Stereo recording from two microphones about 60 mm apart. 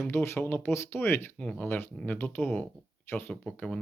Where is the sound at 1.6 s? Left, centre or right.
Left.